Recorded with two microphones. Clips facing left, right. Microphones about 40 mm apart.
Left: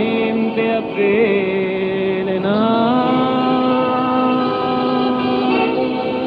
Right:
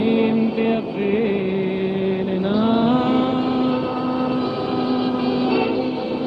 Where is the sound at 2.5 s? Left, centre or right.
Left.